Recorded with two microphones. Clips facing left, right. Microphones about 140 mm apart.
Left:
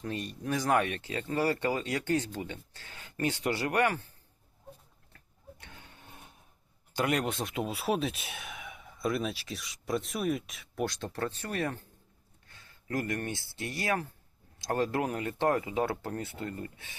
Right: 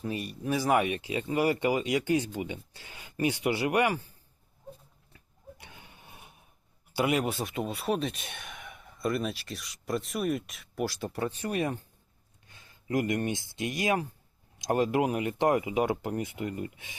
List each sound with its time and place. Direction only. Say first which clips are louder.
0.0 s speech: right 2 dB; 10° right (ahead or behind)
5.1 s a sound: right 3 dB; 10° right (ahead or behind)
6.9 s speech: right 2 dB; 10° right (ahead or behind)